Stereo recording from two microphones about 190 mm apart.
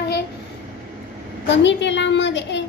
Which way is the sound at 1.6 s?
70° left (ahead or behind).